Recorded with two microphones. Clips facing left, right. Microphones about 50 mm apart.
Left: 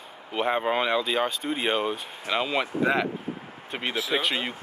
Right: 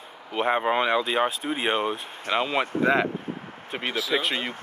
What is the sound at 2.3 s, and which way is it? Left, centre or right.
Speech, right.